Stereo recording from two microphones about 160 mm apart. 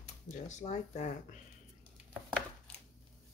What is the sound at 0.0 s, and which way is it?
Speech, 50° left (ahead or behind).